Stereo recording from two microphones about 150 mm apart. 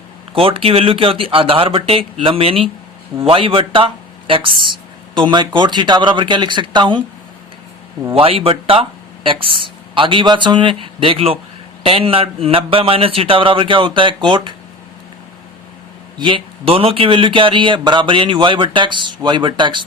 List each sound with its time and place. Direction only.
0.3 s speech: 40° right (ahead or behind)
8.1 s speech: 40° right (ahead or behind)
16.1 s speech: 35° right (ahead or behind)